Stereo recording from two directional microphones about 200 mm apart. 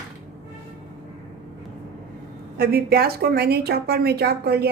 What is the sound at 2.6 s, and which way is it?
A woman's voice, 50° right (ahead or behind).